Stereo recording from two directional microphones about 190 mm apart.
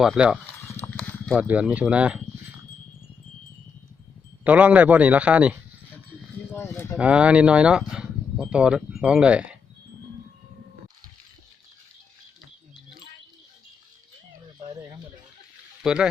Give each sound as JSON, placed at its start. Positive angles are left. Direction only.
{"t": 0.0, "sound": "speech", "side_deg": -5}
{"t": 0.7, "sound": "horse", "side_deg": 10}
{"t": 1.4, "sound": "speech", "side_deg": -5}
{"t": 4.4, "sound": "a man's voice", "side_deg": -5}
{"t": 6.5, "sound": "a sound", "side_deg": 10}
{"t": 6.9, "sound": "speech", "side_deg": -5}
{"t": 14.7, "sound": "a sound", "side_deg": -20}
{"t": 15.8, "sound": "speech", "side_deg": -5}